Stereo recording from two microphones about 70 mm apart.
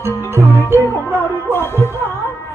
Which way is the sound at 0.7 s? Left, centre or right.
Right.